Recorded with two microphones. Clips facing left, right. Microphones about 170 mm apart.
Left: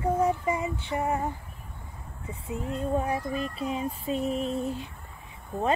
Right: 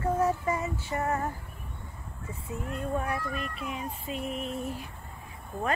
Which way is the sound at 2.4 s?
25° left (ahead or behind).